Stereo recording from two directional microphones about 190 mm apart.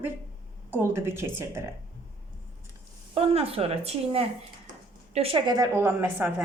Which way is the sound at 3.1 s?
30° right (ahead or behind).